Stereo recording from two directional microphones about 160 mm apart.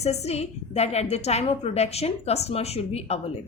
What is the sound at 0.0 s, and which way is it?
A woman's voice, 40° left (ahead or behind).